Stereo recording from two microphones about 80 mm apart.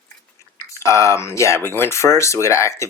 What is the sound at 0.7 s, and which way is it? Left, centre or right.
Speech, left.